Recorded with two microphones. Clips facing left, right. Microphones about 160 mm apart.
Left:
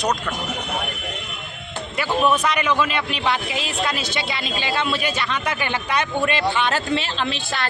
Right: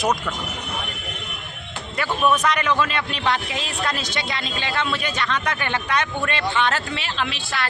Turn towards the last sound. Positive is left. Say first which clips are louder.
# left 2 dB
turn(degrees=30)  # may be behind; listen again after turning